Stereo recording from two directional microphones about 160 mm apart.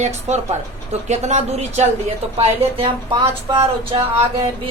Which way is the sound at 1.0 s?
45° right (ahead or behind).